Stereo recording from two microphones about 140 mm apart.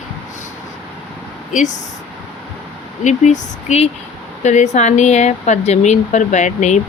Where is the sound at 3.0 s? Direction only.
55° left (ahead or behind).